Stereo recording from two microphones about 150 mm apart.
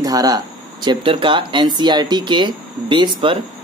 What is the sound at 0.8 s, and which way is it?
Speech, 35° right (ahead or behind).